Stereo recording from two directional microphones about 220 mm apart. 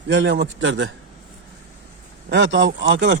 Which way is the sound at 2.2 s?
55° right (ahead or behind).